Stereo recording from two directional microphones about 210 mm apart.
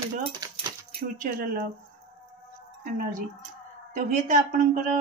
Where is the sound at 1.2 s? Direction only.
45° right (ahead or behind).